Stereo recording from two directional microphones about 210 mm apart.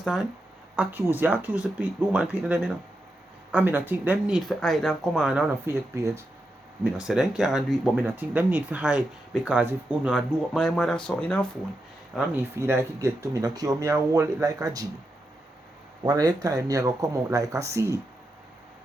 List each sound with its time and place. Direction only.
0.0 s speech: centre (ahead or behind)
12.1 s speech: 10° right (ahead or behind)
16.0 s speech: 20° right (ahead or behind)